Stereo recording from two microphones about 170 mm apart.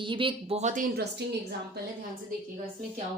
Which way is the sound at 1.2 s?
75° right (ahead or behind).